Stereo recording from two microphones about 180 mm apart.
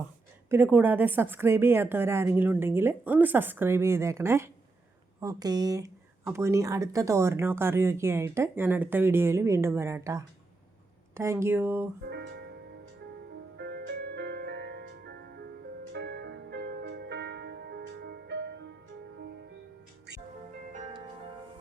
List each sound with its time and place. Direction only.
0.5 s speech: 10° right (ahead or behind)
12.0 s music: 65° right (ahead or behind)
13.6 s music: 65° right (ahead or behind)